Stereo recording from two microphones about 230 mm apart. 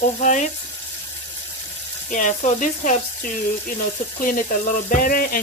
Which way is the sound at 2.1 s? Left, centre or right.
Left.